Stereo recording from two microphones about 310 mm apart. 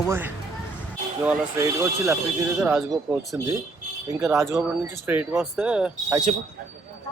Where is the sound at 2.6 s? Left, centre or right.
Centre.